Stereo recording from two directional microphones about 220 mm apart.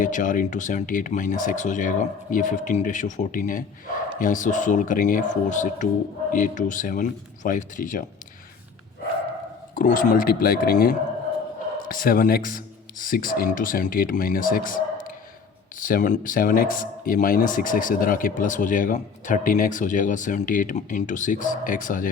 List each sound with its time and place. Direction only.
0.0 s speech: 35° left (ahead or behind)
9.7 s speech: 40° left (ahead or behind)